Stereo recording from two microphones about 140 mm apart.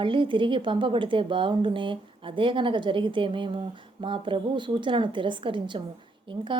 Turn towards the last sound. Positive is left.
turn(degrees=-35)  # may be behind; listen again after turning